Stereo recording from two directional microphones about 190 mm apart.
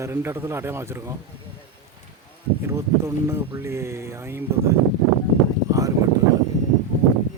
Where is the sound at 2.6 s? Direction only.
15° right (ahead or behind).